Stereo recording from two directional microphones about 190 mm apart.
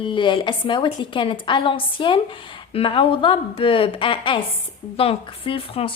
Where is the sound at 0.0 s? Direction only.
25° left (ahead or behind).